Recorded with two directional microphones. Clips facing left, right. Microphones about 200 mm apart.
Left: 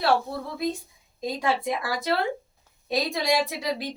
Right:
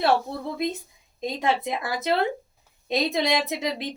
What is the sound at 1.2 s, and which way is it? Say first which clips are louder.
A woman's voice: right 1 dB; 20° right (ahead or behind).